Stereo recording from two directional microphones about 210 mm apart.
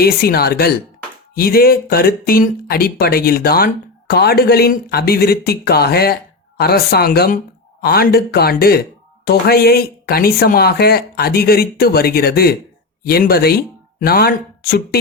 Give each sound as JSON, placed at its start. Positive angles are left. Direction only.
{"t": 0.0, "sound": "speech", "side_deg": 45}